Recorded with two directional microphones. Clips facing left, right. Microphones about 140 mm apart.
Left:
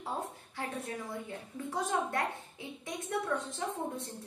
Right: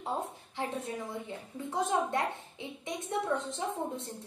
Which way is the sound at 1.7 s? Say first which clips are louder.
Right 3 dB; 20° right (ahead or behind).